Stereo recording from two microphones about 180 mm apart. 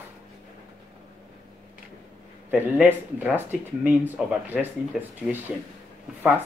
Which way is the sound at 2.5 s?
10° right (ahead or behind).